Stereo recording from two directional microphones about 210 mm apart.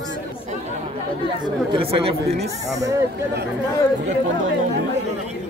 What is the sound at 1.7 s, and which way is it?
Speech, 25° right (ahead or behind).